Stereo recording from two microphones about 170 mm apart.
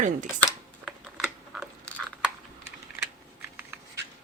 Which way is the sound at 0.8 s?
5° right (ahead or behind).